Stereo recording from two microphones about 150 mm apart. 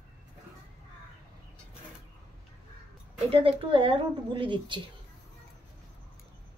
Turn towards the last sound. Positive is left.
turn(degrees=-35)  # may be behind; listen again after turning